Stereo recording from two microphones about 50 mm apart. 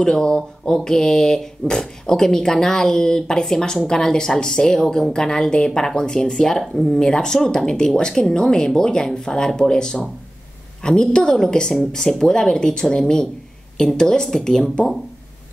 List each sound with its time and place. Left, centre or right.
0.0 s speech: centre